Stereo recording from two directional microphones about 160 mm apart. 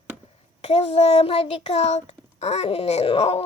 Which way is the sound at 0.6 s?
40° left (ahead or behind).